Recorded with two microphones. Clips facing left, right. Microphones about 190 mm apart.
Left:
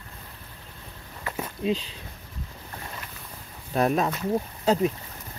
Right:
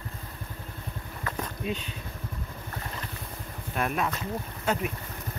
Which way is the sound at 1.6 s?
30° left (ahead or behind).